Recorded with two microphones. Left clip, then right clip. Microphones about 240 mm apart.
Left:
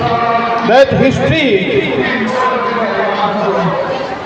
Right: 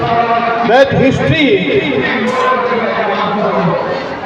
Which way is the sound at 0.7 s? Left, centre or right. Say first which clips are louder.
Left 1 dB; left.